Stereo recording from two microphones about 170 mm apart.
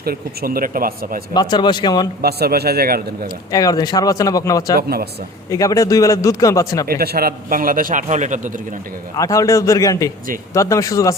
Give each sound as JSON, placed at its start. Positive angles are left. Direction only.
{"t": 0.0, "sound": "speech", "side_deg": -60}
{"t": 1.3, "sound": "speech", "side_deg": 25}
{"t": 2.2, "sound": "a man's voice", "side_deg": -65}
{"t": 3.5, "sound": "speech", "side_deg": 20}
{"t": 4.8, "sound": "speech", "side_deg": -65}
{"t": 5.5, "sound": "speech", "side_deg": 20}
{"t": 6.8, "sound": "speech", "side_deg": -65}
{"t": 9.1, "sound": "speech", "side_deg": 20}